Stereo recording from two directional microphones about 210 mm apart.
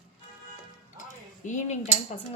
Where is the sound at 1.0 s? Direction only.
35° left (ahead or behind).